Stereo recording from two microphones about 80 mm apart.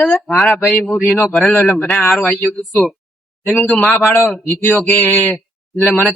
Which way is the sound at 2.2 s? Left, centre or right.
Left.